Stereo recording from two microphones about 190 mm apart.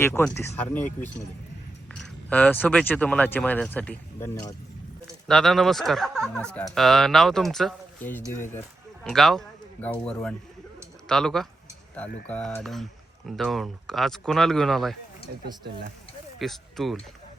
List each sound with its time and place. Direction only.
0.0 s speech: 15° left (ahead or behind)
1.9 s speech: 5° left (ahead or behind)
9.0 s speech: centre (ahead or behind)
16.4 s speech: centre (ahead or behind)